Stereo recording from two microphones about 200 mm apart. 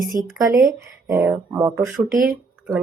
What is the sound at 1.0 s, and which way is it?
Speech, 15° right (ahead or behind).